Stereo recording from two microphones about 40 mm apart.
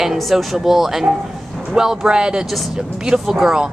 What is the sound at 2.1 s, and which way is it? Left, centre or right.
A woman's voice, right.